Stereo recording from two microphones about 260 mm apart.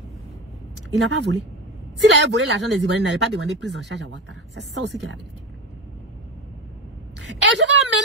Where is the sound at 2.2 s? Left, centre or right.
Right.